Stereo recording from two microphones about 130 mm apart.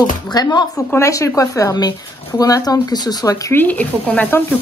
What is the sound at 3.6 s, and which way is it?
Speech, 10° left (ahead or behind).